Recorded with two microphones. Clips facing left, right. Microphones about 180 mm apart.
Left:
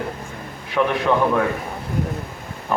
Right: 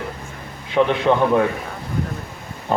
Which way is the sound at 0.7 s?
25° right (ahead or behind).